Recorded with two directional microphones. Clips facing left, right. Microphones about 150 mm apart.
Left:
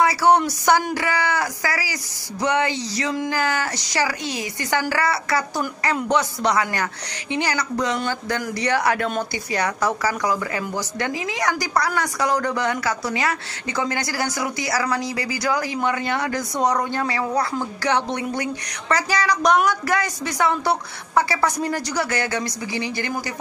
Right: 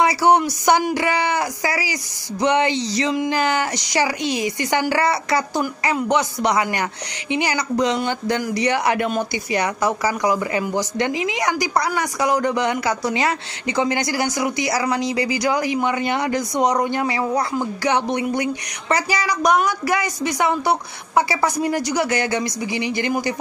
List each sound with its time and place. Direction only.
0.0 s a woman's voice: 15° right (ahead or behind)